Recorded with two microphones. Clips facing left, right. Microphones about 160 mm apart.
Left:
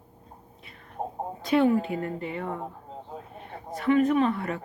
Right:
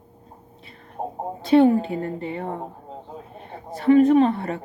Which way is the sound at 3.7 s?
30° right (ahead or behind).